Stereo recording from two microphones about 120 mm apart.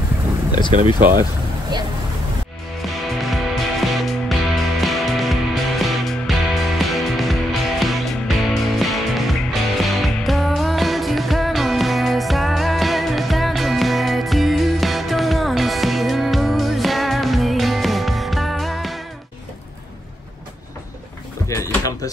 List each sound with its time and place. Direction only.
0.9 s speech: 20° right (ahead or behind)
1.7 s speech: 40° right (ahead or behind)
2.9 s music: centre (ahead or behind)
21.5 s drawer open or close: 25° left (ahead or behind)